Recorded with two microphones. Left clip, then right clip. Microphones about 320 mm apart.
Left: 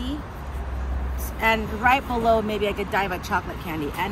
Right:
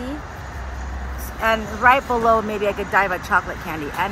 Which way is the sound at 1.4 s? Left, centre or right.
Centre.